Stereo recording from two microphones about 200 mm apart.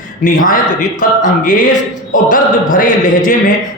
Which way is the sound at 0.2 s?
45° left (ahead or behind).